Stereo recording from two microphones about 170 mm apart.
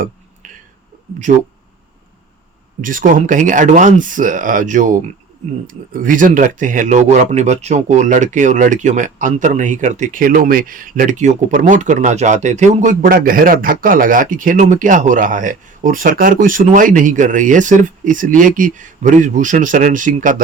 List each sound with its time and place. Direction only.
2.8 s speech: 50° right (ahead or behind)